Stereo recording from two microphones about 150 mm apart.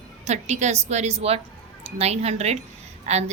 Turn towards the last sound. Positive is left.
turn(degrees=-45)  # may be behind; listen again after turning